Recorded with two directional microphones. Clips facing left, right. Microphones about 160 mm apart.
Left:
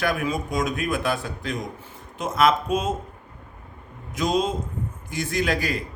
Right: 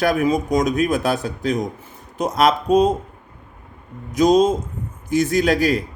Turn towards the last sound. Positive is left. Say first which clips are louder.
# right 7 dB
turn(degrees=-40)  # may be behind; listen again after turning